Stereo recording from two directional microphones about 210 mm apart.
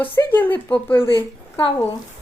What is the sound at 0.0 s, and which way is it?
Speech, 10° left (ahead or behind).